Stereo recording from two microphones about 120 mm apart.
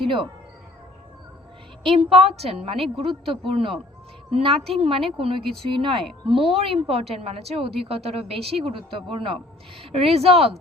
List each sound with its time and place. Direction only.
0.0 s speech: 45° right (ahead or behind)
2.0 s a woman's voice: centre (ahead or behind)
2.3 s a woman's voice: 55° right (ahead or behind)
10.0 s speech: 55° right (ahead or behind)